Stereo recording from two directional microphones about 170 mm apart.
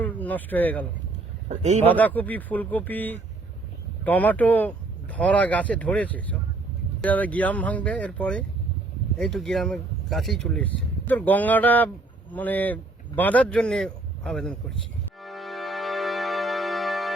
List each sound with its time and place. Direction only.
0.0 s speech: 10° left (ahead or behind)
1.5 s speech: 45° right (ahead or behind)
1.8 s a man's voice: 10° left (ahead or behind)
15.2 s music: centre (ahead or behind)